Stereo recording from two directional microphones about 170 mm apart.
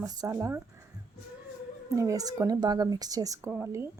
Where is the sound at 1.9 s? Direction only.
20° right (ahead or behind).